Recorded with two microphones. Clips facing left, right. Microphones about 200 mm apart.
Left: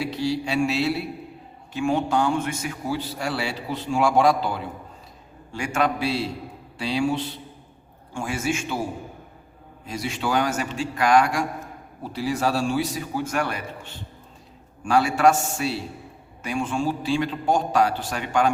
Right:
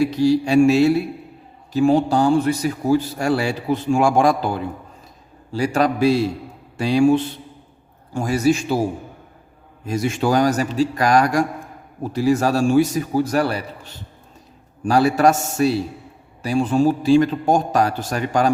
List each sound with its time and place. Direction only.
0.0 s a man's voice: 45° right (ahead or behind)
1.7 s a man's voice: 35° right (ahead or behind)
5.5 s a man's voice: 35° right (ahead or behind)
8.1 s a man's voice: 40° right (ahead or behind)